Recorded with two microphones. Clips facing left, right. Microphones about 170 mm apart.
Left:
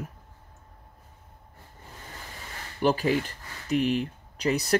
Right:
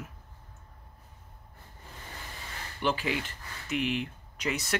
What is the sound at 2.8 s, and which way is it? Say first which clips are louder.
Speech: left 6 dB; 40° left (ahead or behind).